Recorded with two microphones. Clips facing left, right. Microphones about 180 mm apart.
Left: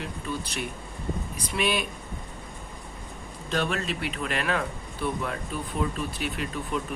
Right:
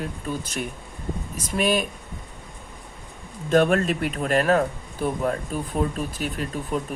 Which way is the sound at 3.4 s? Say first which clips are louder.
Right 9 dB; 50° right (ahead or behind).